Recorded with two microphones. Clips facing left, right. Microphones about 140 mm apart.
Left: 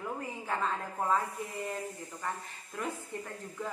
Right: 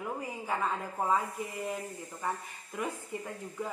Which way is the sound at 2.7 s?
10° right (ahead or behind).